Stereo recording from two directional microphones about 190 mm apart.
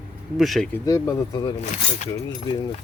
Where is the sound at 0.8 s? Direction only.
20° left (ahead or behind).